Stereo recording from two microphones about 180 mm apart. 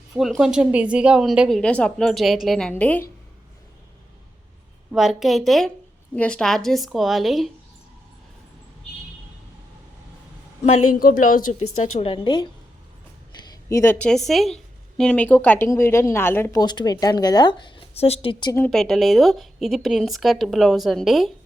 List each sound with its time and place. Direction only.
0.2 s speech: centre (ahead or behind)
4.9 s speech: centre (ahead or behind)
11.0 s a woman's voice: 50° left (ahead or behind); by 12.5 s 25° left (ahead or behind)
13.7 s a woman's voice: 15° left (ahead or behind)
14.1 s a woman's voice: centre (ahead or behind); by 18.5 s 25° left (ahead or behind)
18.5 s speech: 5° left (ahead or behind)